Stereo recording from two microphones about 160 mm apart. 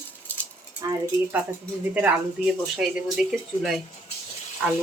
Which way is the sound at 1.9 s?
10° right (ahead or behind).